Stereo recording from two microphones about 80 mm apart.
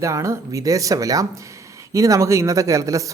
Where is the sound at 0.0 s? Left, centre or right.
Right.